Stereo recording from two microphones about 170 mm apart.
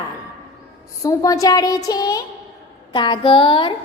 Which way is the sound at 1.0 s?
20° left (ahead or behind).